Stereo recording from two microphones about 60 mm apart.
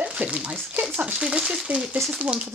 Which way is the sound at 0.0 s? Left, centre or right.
Centre.